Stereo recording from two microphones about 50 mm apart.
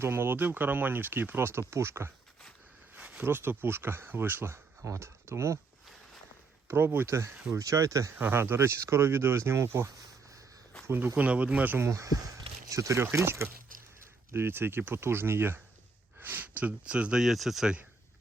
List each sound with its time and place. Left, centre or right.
0.0 s speech: right
3.2 s speech: right
6.7 s speech: right
7.1 s speech: right
7.5 s speech: right
8.2 s speech: right
11.2 s speech: right
11.8 s speech: right
13.1 s speech: right
14.3 s speech: right
16.2 s speech: right
16.8 s speech: right
17.2 s speech: centre